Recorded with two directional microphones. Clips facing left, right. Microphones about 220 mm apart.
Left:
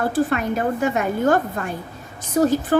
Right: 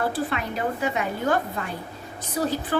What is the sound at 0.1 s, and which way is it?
A woman's voice, 45° left (ahead or behind).